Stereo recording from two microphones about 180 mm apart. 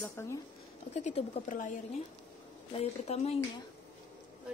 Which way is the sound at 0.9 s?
35° left (ahead or behind).